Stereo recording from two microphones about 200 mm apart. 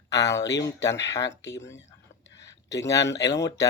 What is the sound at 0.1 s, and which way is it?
Speech, 15° left (ahead or behind).